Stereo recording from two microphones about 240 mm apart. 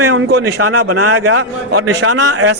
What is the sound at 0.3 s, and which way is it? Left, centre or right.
Speech, right.